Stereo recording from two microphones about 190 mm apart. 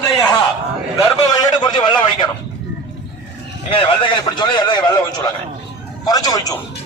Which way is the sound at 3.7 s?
25° left (ahead or behind).